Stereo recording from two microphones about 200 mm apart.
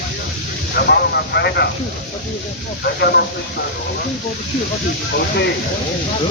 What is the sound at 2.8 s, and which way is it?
Speech, 55° left (ahead or behind).